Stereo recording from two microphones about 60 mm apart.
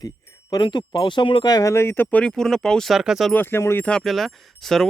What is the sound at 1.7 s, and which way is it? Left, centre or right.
Speech, left.